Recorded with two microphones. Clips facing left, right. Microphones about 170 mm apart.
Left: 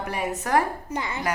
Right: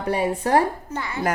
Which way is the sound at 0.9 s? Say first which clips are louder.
Right 1 dB; 20° left (ahead or behind).